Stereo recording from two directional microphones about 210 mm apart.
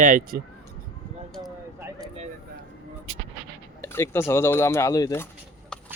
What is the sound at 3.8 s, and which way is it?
Speech, 10° left (ahead or behind).